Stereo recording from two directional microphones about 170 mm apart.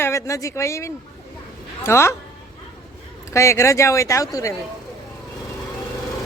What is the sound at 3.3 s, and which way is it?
Speech, 15° left (ahead or behind).